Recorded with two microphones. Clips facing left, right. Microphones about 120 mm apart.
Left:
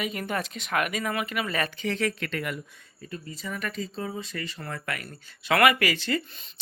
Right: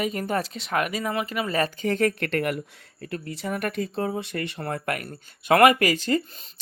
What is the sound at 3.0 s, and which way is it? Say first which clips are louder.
Speech: right 6 dB; 70° right (ahead or behind).